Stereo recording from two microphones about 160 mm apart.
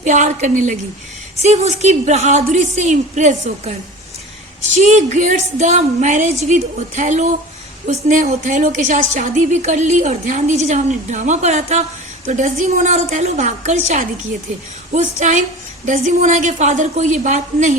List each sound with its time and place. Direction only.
0.0 s a woman's voice: 50° right (ahead or behind)
15.2 s a woman's voice: 50° right (ahead or behind)